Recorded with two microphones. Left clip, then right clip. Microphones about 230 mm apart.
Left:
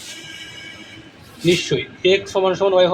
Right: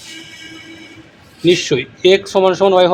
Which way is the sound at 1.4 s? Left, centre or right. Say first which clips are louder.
Right 5 dB; right.